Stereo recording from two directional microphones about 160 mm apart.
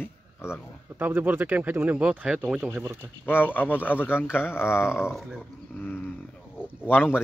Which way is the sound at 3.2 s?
10° left (ahead or behind).